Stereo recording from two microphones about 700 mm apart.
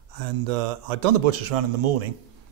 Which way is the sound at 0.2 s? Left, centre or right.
Right.